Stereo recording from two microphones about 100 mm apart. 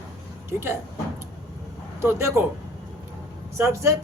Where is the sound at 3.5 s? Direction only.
25° right (ahead or behind).